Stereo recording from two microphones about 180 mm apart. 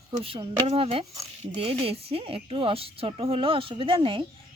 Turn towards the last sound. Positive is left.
turn(degrees=-30)  # may be behind; listen again after turning